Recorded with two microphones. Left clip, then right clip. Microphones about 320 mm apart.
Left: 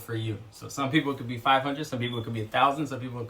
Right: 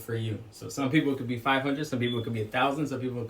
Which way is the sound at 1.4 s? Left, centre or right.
Left.